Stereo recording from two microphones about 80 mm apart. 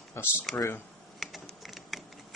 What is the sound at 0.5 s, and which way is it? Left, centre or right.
Speech, left.